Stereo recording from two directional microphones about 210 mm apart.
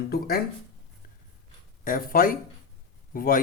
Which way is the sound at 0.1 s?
45° left (ahead or behind).